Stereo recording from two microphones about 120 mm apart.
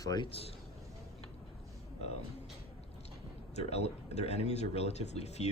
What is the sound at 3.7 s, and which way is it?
Speech, 60° left (ahead or behind).